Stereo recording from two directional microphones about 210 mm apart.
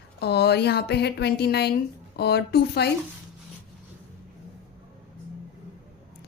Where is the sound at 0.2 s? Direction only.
50° left (ahead or behind).